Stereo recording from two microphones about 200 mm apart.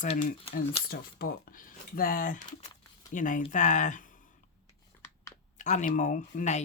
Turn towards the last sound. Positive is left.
turn(degrees=35)  # may be behind; listen again after turning